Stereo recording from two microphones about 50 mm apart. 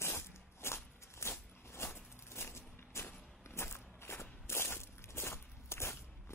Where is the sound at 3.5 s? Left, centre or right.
Left.